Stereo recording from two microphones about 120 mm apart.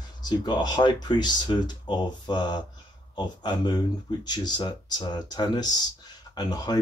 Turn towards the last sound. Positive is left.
turn(degrees=35)  # may be behind; listen again after turning